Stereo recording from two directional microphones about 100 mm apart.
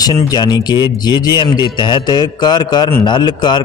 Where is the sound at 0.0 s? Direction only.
45° left (ahead or behind).